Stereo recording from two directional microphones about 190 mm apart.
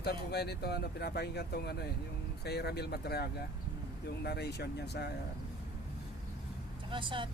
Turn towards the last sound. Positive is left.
turn(degrees=-25)  # may be behind; listen again after turning